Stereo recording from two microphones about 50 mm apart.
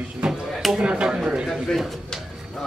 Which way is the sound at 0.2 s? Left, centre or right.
Centre.